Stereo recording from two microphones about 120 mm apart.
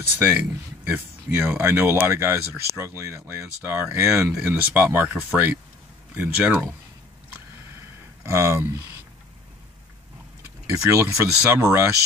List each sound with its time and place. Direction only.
0.2 s speech: 15° right (ahead or behind)
8.2 s speech: 25° right (ahead or behind)
10.7 s speech: 25° right (ahead or behind)